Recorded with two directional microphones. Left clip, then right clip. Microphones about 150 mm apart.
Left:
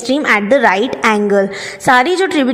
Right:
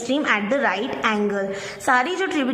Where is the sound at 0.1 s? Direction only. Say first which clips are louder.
Left 9 dB; 40° left (ahead or behind).